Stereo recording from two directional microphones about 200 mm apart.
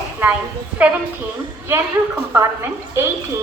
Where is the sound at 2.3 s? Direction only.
15° right (ahead or behind).